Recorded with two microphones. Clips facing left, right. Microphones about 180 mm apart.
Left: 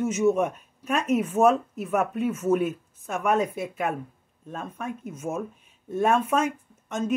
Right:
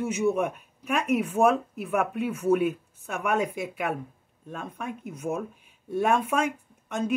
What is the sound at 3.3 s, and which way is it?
Speech, 10° right (ahead or behind).